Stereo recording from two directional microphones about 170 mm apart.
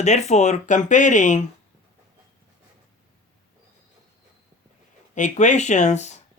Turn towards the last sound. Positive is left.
turn(degrees=45)  # may be behind; listen again after turning